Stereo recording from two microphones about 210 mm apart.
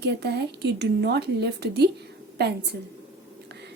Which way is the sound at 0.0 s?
55° right (ahead or behind).